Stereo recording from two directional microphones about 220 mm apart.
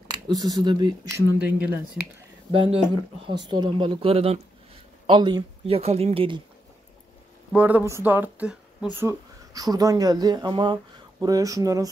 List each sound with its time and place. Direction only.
0.1 s speech: 15° right (ahead or behind)
2.5 s speech: 25° right (ahead or behind)
7.5 s speech: 5° right (ahead or behind)